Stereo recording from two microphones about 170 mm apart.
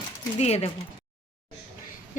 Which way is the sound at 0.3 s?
40° left (ahead or behind).